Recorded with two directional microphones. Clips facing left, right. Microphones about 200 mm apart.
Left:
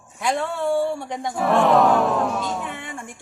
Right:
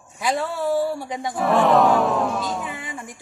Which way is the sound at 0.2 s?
5° right (ahead or behind).